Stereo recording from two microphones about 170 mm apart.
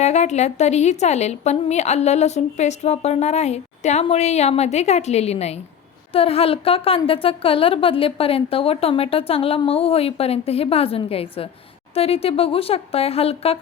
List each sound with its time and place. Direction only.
0.0 s a woman's voice: 40° left (ahead or behind)